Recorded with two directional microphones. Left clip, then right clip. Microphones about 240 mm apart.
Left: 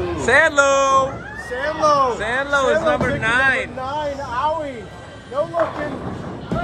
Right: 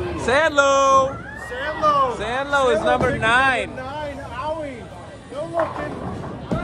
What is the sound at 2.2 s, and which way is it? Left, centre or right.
Speech, centre.